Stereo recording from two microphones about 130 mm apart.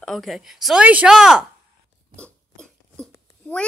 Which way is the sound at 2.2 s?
5° left (ahead or behind).